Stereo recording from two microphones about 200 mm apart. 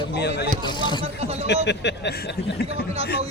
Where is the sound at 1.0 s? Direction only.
30° right (ahead or behind).